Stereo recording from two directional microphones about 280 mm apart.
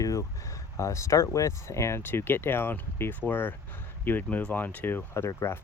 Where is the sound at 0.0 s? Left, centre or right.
Centre.